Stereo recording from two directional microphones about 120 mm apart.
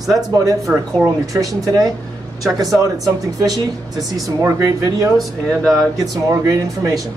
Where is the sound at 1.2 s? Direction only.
30° right (ahead or behind).